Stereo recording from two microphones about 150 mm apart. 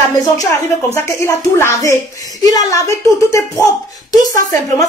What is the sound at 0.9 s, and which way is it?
A woman's voice, 20° left (ahead or behind).